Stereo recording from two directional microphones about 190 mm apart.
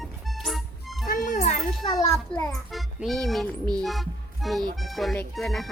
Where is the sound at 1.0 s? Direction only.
45° left (ahead or behind).